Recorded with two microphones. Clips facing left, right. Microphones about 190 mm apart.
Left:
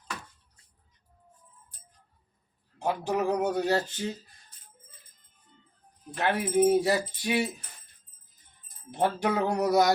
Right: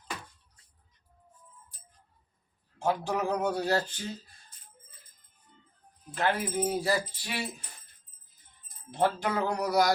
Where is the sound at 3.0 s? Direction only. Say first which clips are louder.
Left 3 dB; 20° left (ahead or behind).